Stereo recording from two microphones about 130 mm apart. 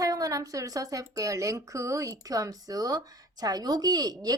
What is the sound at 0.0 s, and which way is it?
A woman's voice, 25° right (ahead or behind).